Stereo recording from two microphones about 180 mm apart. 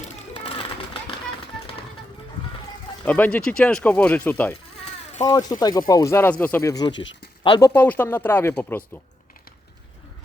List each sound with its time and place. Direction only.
0.0 s a sound: 30° left (ahead or behind)
3.0 s speech: 10° left (ahead or behind)
5.2 s speech: 20° left (ahead or behind)
7.7 s speech: 10° left (ahead or behind)